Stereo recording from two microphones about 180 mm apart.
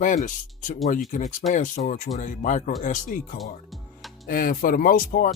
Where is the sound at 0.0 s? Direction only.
45° left (ahead or behind).